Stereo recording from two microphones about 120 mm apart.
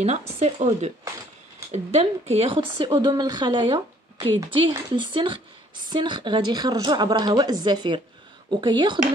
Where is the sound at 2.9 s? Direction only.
35° right (ahead or behind).